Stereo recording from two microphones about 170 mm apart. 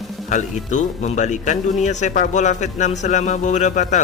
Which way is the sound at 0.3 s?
45° left (ahead or behind).